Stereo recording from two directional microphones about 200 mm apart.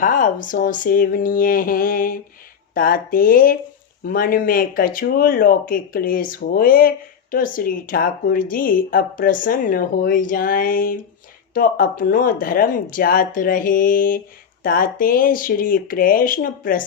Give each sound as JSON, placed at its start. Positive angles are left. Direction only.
{"t": 0.0, "sound": "speech", "side_deg": 40}